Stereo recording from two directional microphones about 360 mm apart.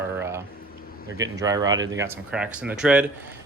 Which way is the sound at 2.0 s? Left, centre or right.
Centre.